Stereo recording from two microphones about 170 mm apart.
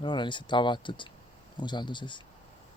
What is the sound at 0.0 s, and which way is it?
Speech, 25° left (ahead or behind).